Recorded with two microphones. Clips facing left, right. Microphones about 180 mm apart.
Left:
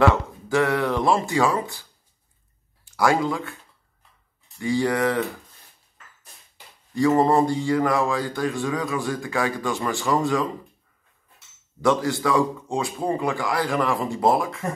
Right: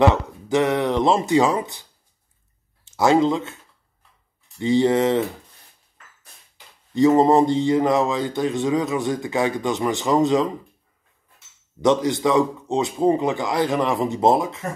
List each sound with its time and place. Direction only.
0.0 s speech: 20° right (ahead or behind)
4.6 s speech: 20° right (ahead or behind)
6.9 s speech: 20° right (ahead or behind)
11.8 s speech: 20° right (ahead or behind)